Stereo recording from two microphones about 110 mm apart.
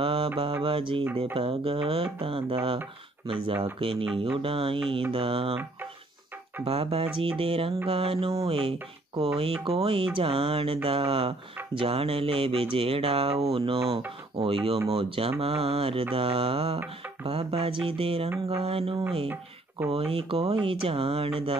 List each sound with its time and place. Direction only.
0.0 s mantra: 55° right (ahead or behind)
0.6 s music: 55° right (ahead or behind)
1.3 s speech: 55° right (ahead or behind)
2.1 s music: 50° right (ahead or behind)
3.8 s music: 50° right (ahead or behind)
4.4 s speech: 55° right (ahead or behind)
6.6 s speech: 60° right (ahead or behind)
14.3 s music: 55° right (ahead or behind)
14.9 s speech: 55° right (ahead or behind)